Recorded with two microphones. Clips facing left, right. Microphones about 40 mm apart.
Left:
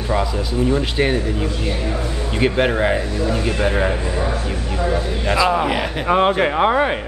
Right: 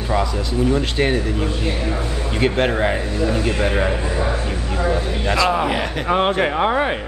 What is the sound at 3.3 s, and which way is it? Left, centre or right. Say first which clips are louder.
Speech: even; left.